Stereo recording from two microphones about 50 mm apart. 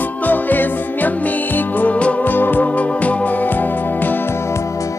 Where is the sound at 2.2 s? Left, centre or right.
Left.